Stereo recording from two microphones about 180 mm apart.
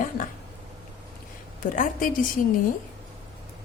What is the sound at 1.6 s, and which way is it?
Speech, 50° left (ahead or behind).